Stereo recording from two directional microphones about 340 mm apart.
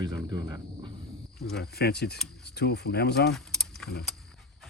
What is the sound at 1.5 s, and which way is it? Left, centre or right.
Speech, left.